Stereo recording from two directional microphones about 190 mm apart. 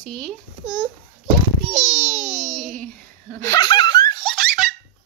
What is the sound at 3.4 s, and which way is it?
Speech, 20° left (ahead or behind).